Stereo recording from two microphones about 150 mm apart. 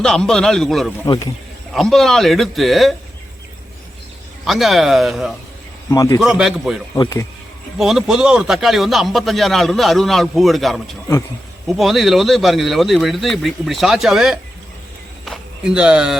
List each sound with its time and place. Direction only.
0.0 s a man's voice: 5° left (ahead or behind)
1.0 s speech: 25° left (ahead or behind)
1.7 s a man's voice: centre (ahead or behind)
4.4 s a man's voice: centre (ahead or behind)
5.9 s speech: 20° left (ahead or behind)
6.1 s a man's voice: 5° right (ahead or behind)
6.9 s speech: 20° left (ahead or behind)
7.8 s a man's voice: 5° right (ahead or behind)